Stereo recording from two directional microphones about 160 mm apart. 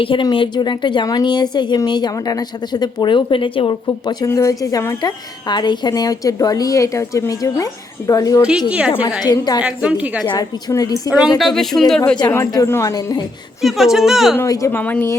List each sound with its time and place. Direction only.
0.0 s speech: 30° left (ahead or behind)
9.6 s a woman's voice: 5° right (ahead or behind)
10.2 s speech: 25° left (ahead or behind)
11.3 s a woman's voice: centre (ahead or behind)
12.3 s speech: 15° left (ahead or behind)
13.6 s a woman's voice: centre (ahead or behind)
14.3 s a woman's voice: 20° left (ahead or behind)